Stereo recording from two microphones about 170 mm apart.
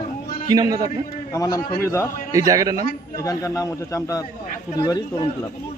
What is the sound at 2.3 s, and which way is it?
Speech, 20° right (ahead or behind).